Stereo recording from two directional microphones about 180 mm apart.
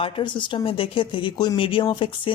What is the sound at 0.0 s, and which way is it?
Speech, 25° left (ahead or behind).